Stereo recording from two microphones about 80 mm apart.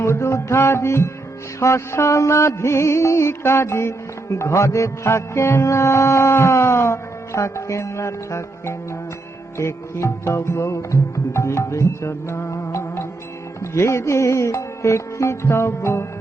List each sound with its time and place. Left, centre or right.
0.0 s music: left